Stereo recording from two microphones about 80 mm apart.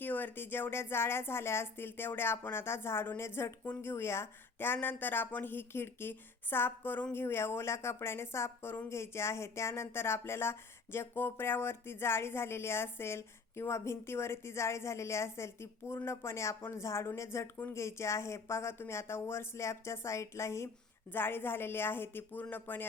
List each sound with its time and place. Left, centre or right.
0.0 s a woman's voice: left